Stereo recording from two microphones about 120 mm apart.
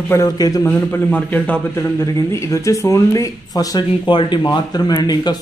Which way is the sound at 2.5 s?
25° left (ahead or behind).